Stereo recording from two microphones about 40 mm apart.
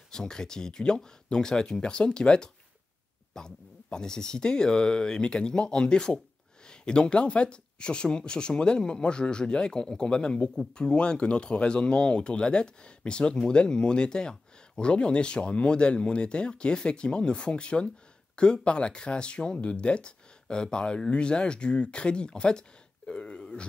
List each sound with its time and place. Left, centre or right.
0.1 s speech: centre